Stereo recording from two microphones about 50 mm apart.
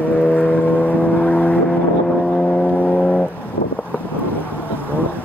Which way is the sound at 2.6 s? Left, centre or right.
Left.